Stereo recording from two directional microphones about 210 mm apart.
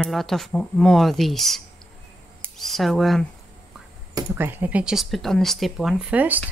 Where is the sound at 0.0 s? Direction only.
Centre (ahead or behind).